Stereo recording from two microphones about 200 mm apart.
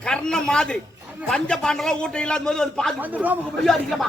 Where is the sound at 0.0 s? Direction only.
5° left (ahead or behind).